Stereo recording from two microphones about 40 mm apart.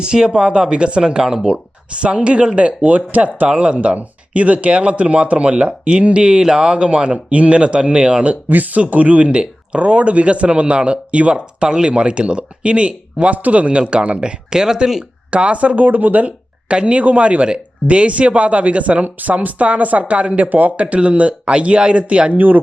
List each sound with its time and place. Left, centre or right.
0.0 s speech: centre
1.5 s speech: right
8.4 s speech: right; by 15.0 s centre
15.3 s speech: right
16.6 s speech: right
20.9 s speech: right
22.4 s speech: right